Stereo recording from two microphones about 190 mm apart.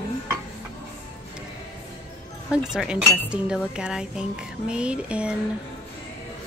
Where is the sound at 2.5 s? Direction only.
5° right (ahead or behind).